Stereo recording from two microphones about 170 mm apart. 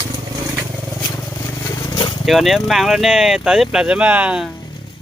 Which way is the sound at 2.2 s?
Centre (ahead or behind).